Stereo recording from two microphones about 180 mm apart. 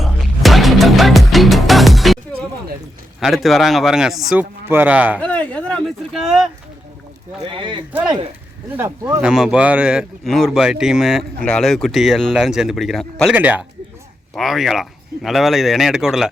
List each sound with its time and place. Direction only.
0.0 s music: centre (ahead or behind)
3.2 s speech: centre (ahead or behind)
5.2 s speech: 10° left (ahead or behind)
7.4 s speech: 30° right (ahead or behind)
8.7 s speech: 10° right (ahead or behind)
13.3 s speech: 10° right (ahead or behind)